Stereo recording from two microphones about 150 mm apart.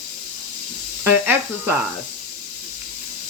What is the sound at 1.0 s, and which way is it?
Speech, 15° right (ahead or behind).